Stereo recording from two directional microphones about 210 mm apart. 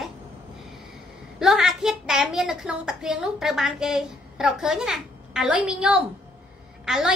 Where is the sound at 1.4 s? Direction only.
Centre (ahead or behind).